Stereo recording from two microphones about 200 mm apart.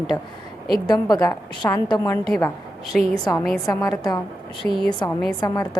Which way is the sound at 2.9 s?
Centre (ahead or behind).